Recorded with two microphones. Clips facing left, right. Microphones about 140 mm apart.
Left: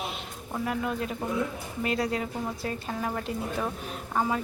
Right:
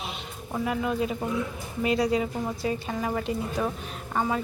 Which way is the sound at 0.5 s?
5° right (ahead or behind).